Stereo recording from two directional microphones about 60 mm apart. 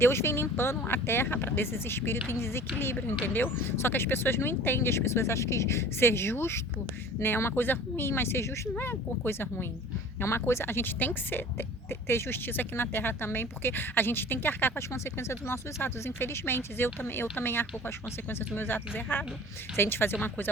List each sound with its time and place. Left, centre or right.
0.0 s a woman's voice: left
8.8 s a woman's voice: left
14.9 s a woman's voice: left